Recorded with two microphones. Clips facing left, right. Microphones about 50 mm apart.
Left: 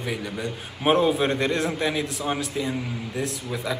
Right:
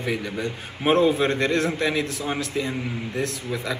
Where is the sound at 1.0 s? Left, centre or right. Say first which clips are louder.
Right 2 dB; left.